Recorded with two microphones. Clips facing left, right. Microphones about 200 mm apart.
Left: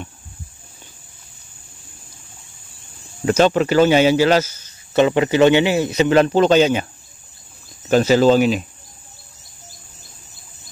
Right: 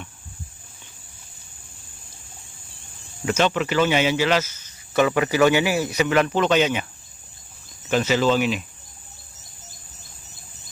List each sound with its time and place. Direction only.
3.3 s speech: 40° left (ahead or behind)
7.9 s speech: 40° left (ahead or behind)